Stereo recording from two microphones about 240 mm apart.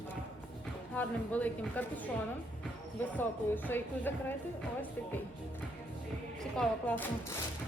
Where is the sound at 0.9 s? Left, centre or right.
Centre.